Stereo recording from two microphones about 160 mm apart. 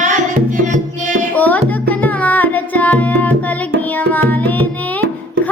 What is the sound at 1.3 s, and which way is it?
Music, 10° left (ahead or behind).